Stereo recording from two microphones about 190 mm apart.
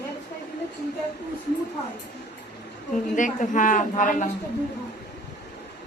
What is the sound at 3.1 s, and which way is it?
A man's voice, 45° left (ahead or behind).